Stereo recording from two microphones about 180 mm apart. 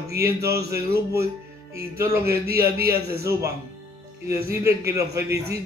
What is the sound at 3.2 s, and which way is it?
A man's voice, 15° right (ahead or behind).